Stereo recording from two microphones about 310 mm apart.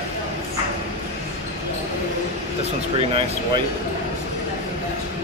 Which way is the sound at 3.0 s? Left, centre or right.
Centre.